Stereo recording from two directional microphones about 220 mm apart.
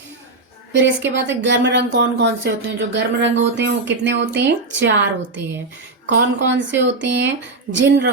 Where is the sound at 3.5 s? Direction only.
55° right (ahead or behind).